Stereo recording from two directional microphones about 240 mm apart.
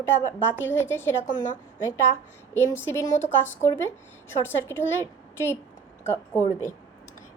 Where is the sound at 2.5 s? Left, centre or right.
Centre.